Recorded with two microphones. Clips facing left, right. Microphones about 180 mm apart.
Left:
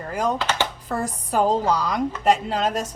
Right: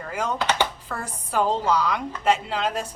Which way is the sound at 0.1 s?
40° left (ahead or behind).